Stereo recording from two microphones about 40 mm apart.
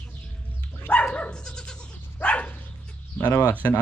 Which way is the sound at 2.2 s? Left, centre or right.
Left.